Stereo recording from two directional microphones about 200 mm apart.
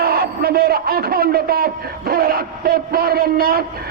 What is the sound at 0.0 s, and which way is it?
A man's voice, 50° right (ahead or behind).